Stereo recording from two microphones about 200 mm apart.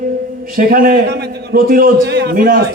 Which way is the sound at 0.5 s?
45° right (ahead or behind).